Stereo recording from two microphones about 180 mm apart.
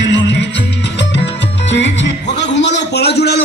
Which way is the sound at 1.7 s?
85° left.